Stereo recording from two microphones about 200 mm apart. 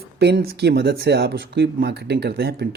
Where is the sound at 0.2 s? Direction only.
55° right (ahead or behind).